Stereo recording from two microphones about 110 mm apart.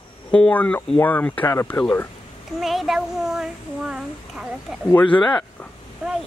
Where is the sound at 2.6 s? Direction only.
Centre (ahead or behind).